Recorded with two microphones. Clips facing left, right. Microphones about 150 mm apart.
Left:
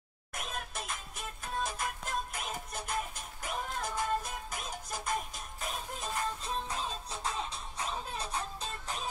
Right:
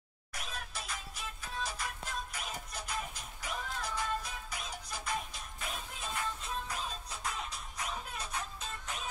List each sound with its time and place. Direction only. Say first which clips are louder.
0.3 s music: left 4 dB; 50° left (ahead or behind); by 9.1 s 35° left (ahead or behind)